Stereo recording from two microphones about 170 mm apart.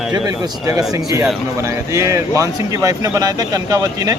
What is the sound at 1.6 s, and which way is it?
Speech, 15° right (ahead or behind).